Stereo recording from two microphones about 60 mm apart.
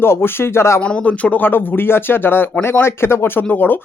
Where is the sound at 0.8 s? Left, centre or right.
Left.